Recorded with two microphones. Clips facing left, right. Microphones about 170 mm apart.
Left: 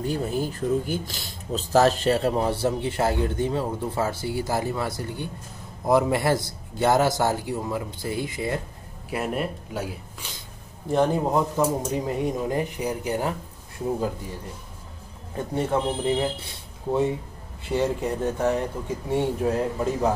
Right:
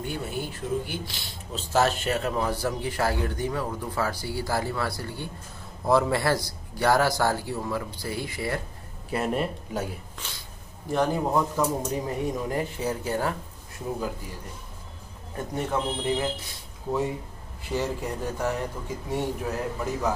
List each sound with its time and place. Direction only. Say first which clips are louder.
0.0 s a man's voice: left 6 dB; 35° left (ahead or behind); by 8.5 s 20° left (ahead or behind)
9.1 s speech: even; 5° left (ahead or behind)
10.9 s a man's voice: left 3 dB; 25° left (ahead or behind)
15.3 s a man's voice: left 4 dB; 25° left (ahead or behind)